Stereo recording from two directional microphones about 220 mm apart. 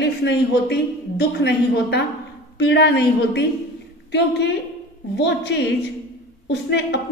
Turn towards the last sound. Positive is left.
turn(degrees=50)  # may be behind; listen again after turning